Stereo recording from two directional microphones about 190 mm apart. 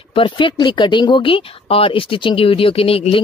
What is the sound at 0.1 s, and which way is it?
Speech, 25° left (ahead or behind).